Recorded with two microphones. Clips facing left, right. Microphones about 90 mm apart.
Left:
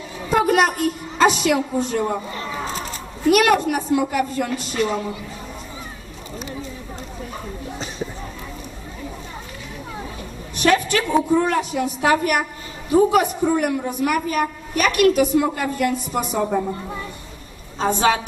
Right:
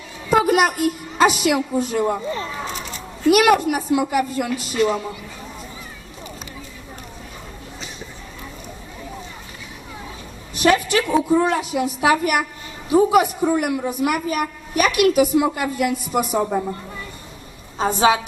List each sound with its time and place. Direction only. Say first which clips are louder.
0.3 s a woman's voice: right 1 dB; 5° right (ahead or behind)
2.6 s a sound: left 2 dB; 35° left (ahead or behind)
3.2 s a woman's voice: right 1 dB; 5° right (ahead or behind)
10.5 s a sound: right 1 dB; 5° right (ahead or behind)
11.3 s a man's voice: right 1 dB; 15° right (ahead or behind)
17.7 s a man's voice: right 1 dB; 10° right (ahead or behind)